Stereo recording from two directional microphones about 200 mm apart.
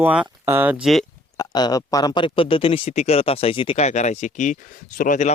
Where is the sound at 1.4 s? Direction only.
20° left (ahead or behind).